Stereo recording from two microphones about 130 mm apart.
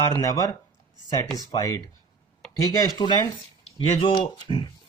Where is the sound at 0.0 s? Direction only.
25° left (ahead or behind).